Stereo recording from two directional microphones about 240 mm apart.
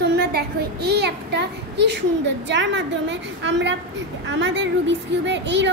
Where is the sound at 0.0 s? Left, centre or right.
Right.